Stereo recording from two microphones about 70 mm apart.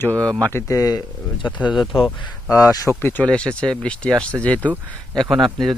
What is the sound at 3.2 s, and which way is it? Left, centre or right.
Speech, centre.